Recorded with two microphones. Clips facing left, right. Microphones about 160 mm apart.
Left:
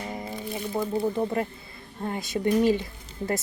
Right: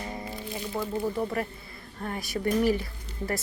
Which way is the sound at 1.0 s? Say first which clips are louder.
Left 3 dB; 25° left (ahead or behind).